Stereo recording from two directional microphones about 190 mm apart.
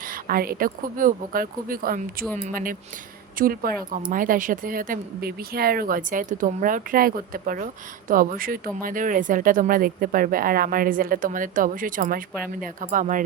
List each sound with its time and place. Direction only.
0.0 s speech: 50° right (ahead or behind)